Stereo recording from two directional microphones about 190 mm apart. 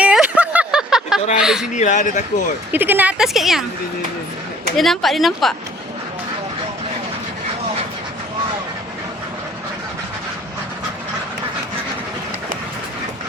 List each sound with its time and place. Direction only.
0.0 s a sound: 5° right (ahead or behind)
1.4 s speech: 5° right (ahead or behind)
1.7 s speech: 40° left (ahead or behind)
2.7 s a woman's voice: 10° right (ahead or behind)
4.8 s speech: centre (ahead or behind)